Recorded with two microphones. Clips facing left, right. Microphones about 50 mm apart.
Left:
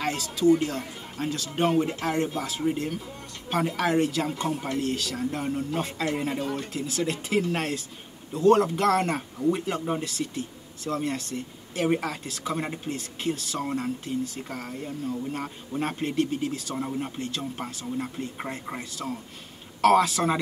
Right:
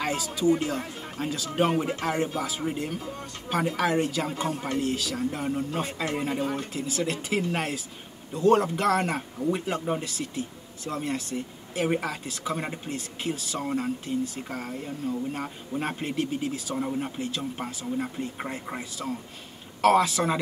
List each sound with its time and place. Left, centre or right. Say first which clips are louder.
0.0 s speech: left 2 dB; centre